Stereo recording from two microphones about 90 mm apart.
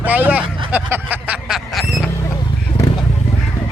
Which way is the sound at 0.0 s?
20° right (ahead or behind).